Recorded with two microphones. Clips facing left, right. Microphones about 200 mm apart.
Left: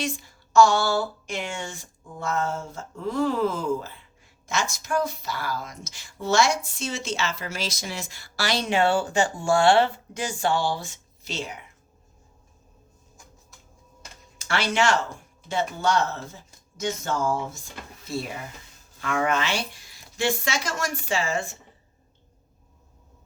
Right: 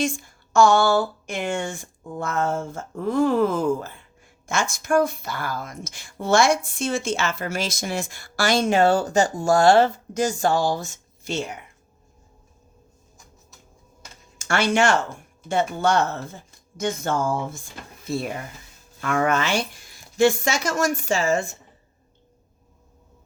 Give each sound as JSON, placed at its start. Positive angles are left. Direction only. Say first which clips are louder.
{"t": 0.0, "sound": "speech", "louder": "right 5 dB", "side_deg": -50}
{"t": 14.3, "sound": "speech", "louder": "right 4 dB", "side_deg": -50}
{"t": 19.0, "sound": "speech", "louder": "right 3 dB", "side_deg": -50}